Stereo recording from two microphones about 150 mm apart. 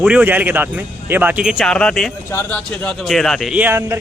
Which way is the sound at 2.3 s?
15° left (ahead or behind).